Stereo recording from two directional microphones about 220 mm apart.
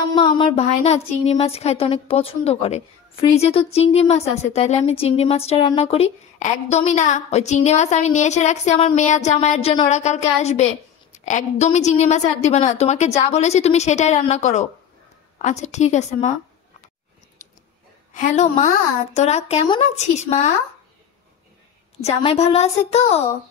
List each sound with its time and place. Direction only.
0.1 s a woman's voice: 20° left (ahead or behind)
18.1 s a woman's voice: 35° left (ahead or behind)
22.0 s speech: 25° left (ahead or behind)